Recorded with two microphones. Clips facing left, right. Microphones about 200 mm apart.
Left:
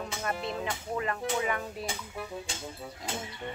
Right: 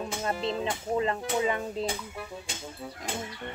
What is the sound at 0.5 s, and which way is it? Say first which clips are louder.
Speech: right 4 dB; 25° right (ahead or behind).